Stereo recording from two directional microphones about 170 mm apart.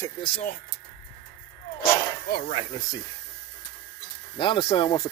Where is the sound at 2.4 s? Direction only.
40° left (ahead or behind).